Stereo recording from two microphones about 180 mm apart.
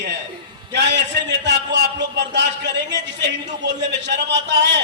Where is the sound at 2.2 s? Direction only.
75° right (ahead or behind).